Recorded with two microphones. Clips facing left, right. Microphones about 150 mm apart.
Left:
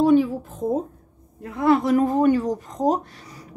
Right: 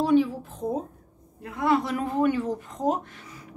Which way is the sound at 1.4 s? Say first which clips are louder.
Left 5 dB; 40° left (ahead or behind).